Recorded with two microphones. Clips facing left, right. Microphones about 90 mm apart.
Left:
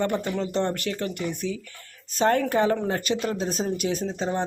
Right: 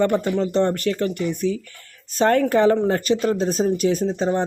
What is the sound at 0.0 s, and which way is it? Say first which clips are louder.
Speech: right 6 dB; 45° right (ahead or behind).